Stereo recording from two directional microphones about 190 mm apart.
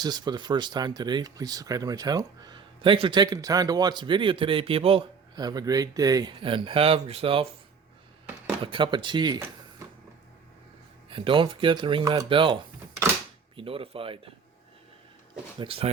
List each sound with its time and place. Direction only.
0.0 s speech: 20° right (ahead or behind)
8.6 s speech: 25° right (ahead or behind)
11.1 s speech: 25° right (ahead or behind)
13.6 s speech: 30° right (ahead or behind)
15.5 s speech: 30° right (ahead or behind)